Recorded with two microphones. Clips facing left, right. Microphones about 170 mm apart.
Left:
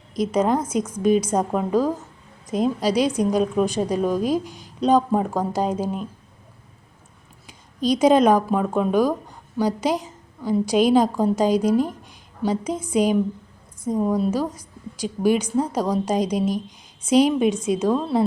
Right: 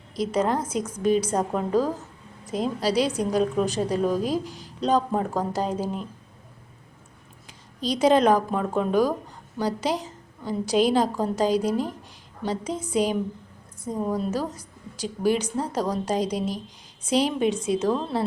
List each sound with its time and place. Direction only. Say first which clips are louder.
0.2 s a woman's voice: left 4 dB; 15° left (ahead or behind)
7.8 s a woman's voice: left 3 dB; 15° left (ahead or behind)